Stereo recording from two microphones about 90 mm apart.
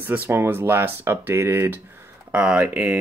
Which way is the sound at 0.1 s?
25° right (ahead or behind).